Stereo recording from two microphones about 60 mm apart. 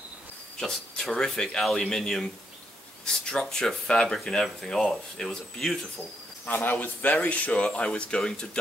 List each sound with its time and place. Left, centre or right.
0.6 s speech: centre
3.3 s speech: centre
6.5 s speech: left; by 8.5 s centre